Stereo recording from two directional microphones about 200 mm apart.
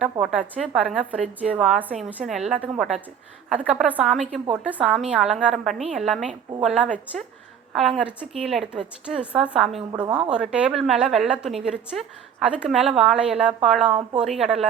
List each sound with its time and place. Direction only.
0.0 s a woman's voice: 5° right (ahead or behind)
9.9 s speech: 20° right (ahead or behind)
10.2 s a woman's voice: 5° right (ahead or behind)